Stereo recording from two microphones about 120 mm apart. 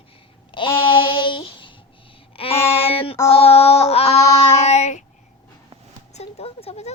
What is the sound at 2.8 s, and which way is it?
Speech, 55° left (ahead or behind).